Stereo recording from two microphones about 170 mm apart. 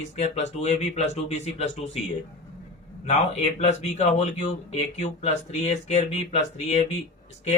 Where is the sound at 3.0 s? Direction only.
40° left (ahead or behind).